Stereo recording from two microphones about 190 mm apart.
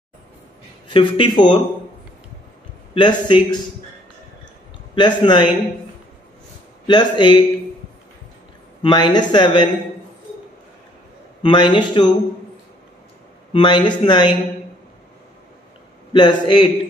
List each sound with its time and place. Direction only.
0.8 s speech: 25° left (ahead or behind)
2.9 s speech: 25° left (ahead or behind)
4.9 s speech: 25° left (ahead or behind)
6.9 s speech: 25° left (ahead or behind)
8.8 s speech: 25° left (ahead or behind)
11.4 s speech: 25° left (ahead or behind)
13.5 s speech: 25° left (ahead or behind)
16.1 s speech: 25° left (ahead or behind)